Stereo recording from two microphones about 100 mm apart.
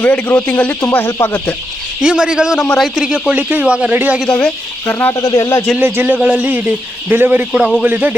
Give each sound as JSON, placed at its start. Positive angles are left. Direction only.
{"t": 0.0, "sound": "speech", "side_deg": 15}
{"t": 2.0, "sound": "speech", "side_deg": -10}
{"t": 4.4, "sound": "speech", "side_deg": 10}
{"t": 4.9, "sound": "speech", "side_deg": 25}
{"t": 5.8, "sound": "speech", "side_deg": -20}